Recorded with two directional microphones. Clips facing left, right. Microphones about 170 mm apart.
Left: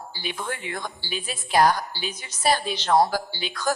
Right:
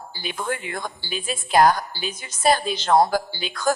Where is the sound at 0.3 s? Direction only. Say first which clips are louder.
Right 5 dB; 45° right (ahead or behind).